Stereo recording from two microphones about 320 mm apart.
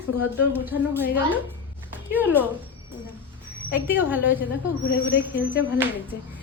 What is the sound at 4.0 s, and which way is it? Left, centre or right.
Speech, centre.